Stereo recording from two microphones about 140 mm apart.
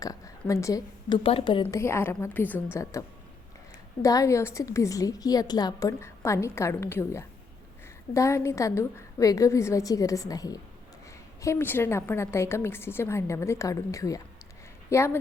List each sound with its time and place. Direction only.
0.0 s a woman's voice: 25° left (ahead or behind)
1.1 s a woman's voice: 40° left (ahead or behind)
1.6 s a woman's voice: 20° left (ahead or behind)
4.0 s a woman's voice: 25° left (ahead or behind)